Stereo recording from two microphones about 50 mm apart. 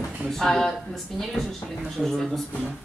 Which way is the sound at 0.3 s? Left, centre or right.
Centre.